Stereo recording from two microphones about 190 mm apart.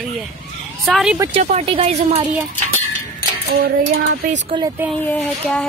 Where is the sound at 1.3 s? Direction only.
30° right (ahead or behind).